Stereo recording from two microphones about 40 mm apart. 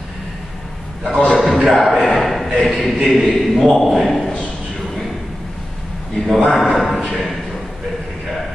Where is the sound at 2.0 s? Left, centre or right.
Centre.